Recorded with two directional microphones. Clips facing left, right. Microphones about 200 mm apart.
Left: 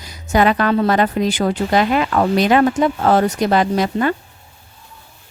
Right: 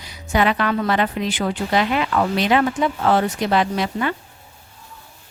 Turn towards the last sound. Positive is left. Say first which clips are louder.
# left 4 dB
turn(degrees=45)  # may be behind; listen again after turning